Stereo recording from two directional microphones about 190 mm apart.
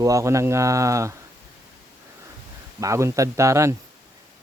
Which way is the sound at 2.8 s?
15° right (ahead or behind).